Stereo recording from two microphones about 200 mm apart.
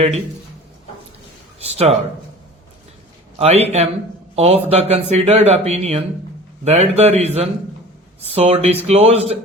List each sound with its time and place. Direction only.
1.5 s speech: 30° right (ahead or behind)
3.3 s a man's voice: 30° right (ahead or behind)